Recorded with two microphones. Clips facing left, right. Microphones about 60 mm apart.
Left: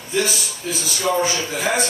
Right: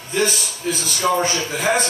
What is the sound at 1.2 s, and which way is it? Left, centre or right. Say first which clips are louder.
Speech: even; right.